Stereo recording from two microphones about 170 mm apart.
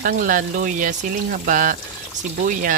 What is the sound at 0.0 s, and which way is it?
Speech, 50° right (ahead or behind).